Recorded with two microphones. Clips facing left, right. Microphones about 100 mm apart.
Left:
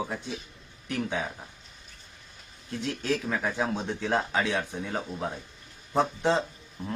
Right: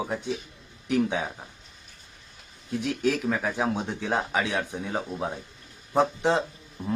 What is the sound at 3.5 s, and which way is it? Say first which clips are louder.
Speech: right 2 dB; 15° right (ahead or behind).